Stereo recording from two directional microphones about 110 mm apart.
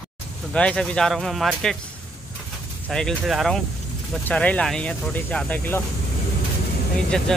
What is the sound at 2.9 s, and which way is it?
Speech, 5° left (ahead or behind).